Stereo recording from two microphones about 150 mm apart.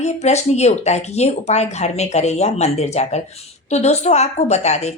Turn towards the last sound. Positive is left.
turn(degrees=45)  # may be behind; listen again after turning